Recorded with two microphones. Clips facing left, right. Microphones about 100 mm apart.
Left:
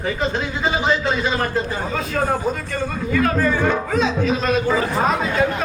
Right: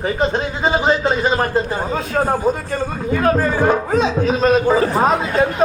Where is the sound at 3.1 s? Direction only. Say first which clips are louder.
Right 2 dB; 40° right (ahead or behind).